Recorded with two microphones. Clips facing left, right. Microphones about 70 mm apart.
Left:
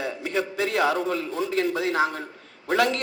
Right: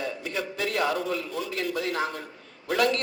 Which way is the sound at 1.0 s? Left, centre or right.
Left.